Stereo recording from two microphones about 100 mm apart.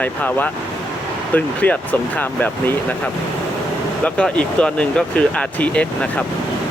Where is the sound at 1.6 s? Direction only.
15° left (ahead or behind).